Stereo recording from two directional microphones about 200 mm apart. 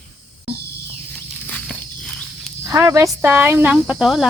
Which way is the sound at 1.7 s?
Centre (ahead or behind).